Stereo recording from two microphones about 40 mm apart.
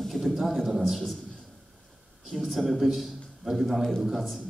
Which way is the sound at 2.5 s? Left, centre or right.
Centre.